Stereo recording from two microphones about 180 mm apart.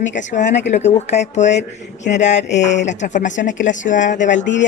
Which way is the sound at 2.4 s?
75° left (ahead or behind).